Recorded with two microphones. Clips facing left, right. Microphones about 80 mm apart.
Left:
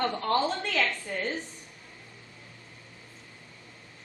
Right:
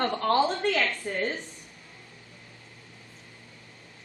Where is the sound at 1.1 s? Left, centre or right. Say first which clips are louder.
Right 3 dB; right.